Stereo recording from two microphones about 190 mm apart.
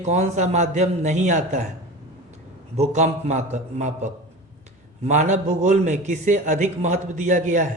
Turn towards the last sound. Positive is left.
turn(degrees=-40)  # may be behind; listen again after turning